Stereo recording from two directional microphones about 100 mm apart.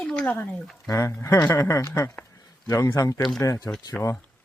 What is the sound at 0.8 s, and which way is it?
Speech, 30° left (ahead or behind).